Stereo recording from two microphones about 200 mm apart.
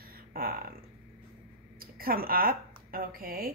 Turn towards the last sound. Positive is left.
turn(degrees=-45)  # may be behind; listen again after turning